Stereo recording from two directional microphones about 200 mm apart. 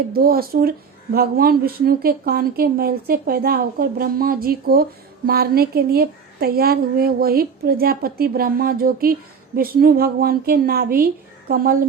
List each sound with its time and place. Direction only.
0.1 s a woman's voice: 50° right (ahead or behind)